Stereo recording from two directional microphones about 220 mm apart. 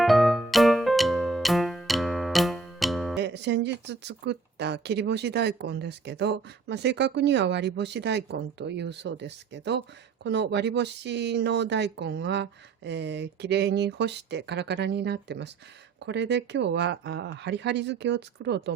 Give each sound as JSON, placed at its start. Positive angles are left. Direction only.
{"t": 0.0, "sound": "music", "side_deg": 0}
{"t": 3.2, "sound": "speech", "side_deg": -50}